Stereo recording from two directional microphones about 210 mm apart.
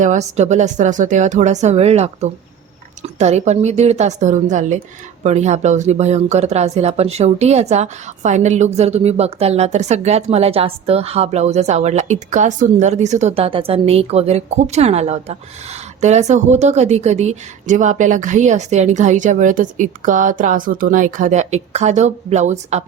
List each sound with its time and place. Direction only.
0.0 s speech: 35° right (ahead or behind)